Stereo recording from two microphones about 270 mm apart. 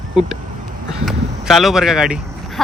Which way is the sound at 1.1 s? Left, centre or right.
Centre.